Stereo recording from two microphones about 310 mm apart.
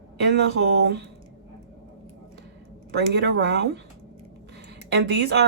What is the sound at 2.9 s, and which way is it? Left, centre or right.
Speech, right.